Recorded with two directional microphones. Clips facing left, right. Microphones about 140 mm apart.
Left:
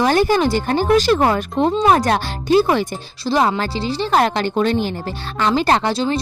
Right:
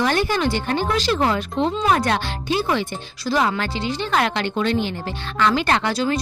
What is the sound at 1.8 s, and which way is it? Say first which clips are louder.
Speech: left 5 dB; 35° left (ahead or behind).